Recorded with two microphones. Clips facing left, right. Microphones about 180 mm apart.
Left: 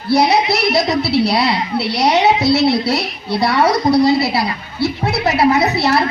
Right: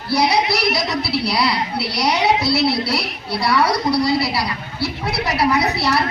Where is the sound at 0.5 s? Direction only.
25° left (ahead or behind).